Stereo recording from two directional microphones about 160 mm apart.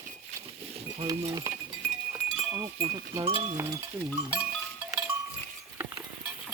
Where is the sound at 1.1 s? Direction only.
25° right (ahead or behind).